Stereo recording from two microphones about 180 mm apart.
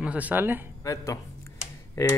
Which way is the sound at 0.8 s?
20° left (ahead or behind).